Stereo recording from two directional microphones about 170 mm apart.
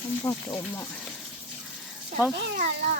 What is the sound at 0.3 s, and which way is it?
Speech, 20° left (ahead or behind).